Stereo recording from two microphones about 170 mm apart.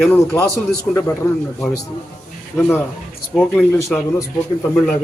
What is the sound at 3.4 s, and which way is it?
Speech, 10° left (ahead or behind).